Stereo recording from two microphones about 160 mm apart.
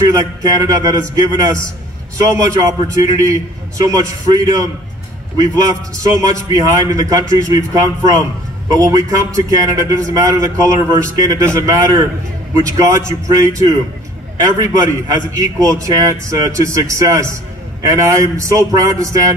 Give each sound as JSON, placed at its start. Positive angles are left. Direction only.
{"t": 0.1, "sound": "a man's voice", "side_deg": -20}